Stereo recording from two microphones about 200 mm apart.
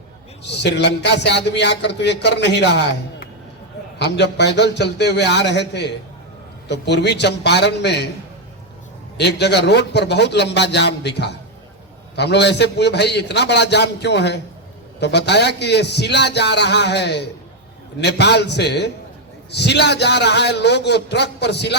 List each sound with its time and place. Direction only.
0.4 s a man's voice: 60° left (ahead or behind)
9.1 s a man's voice: 55° left (ahead or behind)